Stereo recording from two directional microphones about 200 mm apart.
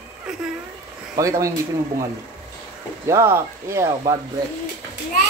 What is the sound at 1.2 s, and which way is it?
Speech, 15° right (ahead or behind).